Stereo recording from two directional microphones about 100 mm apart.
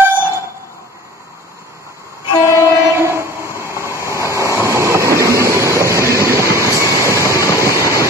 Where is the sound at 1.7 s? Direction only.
30° right (ahead or behind).